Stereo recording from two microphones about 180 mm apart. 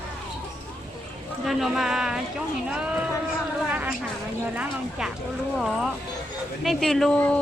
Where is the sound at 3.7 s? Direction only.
5° right (ahead or behind).